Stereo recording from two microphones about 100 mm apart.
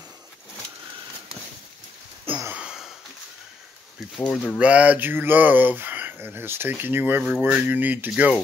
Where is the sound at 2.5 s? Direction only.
10° right (ahead or behind).